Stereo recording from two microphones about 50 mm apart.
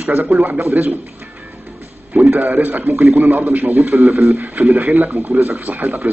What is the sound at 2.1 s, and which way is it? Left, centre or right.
A man's voice, right.